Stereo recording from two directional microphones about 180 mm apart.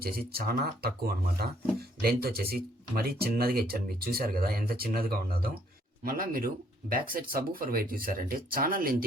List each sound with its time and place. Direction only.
0.0 s speech: 60° right (ahead or behind)